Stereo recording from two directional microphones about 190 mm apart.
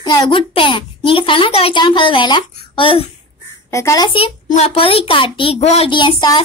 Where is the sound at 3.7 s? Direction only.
15° left (ahead or behind).